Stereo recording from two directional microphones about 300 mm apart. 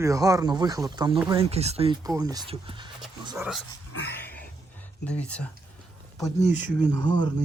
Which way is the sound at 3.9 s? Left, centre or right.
Left.